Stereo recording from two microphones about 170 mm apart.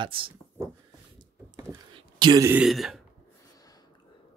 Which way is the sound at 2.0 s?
25° right (ahead or behind).